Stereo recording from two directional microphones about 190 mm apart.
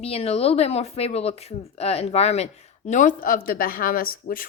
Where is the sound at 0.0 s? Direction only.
30° left (ahead or behind).